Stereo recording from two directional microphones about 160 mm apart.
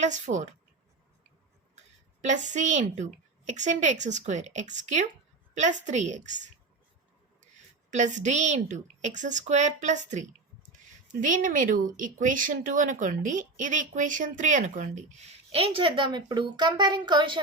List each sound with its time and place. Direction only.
0.0 s speech: 50° right (ahead or behind)
2.2 s speech: 50° right (ahead or behind)
7.9 s speech: 45° right (ahead or behind); by 17.4 s 30° right (ahead or behind)